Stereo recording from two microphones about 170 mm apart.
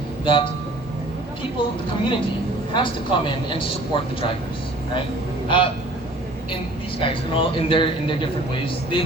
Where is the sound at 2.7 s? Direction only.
30° left (ahead or behind).